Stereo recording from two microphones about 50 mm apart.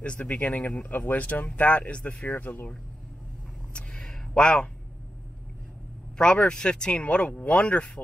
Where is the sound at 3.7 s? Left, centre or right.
Centre.